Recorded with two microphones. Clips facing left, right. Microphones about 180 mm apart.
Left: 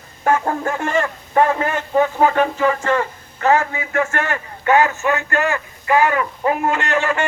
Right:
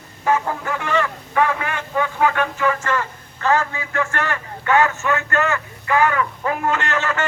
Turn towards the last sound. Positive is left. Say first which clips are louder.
# left 3 dB
turn(degrees=15)  # may be behind; listen again after turning